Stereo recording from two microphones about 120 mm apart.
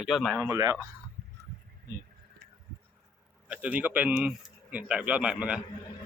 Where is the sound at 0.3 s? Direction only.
20° right (ahead or behind).